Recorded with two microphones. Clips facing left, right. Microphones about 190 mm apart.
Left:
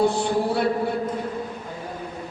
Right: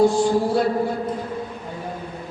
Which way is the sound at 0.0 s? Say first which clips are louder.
Right 4 dB; 65° left (ahead or behind).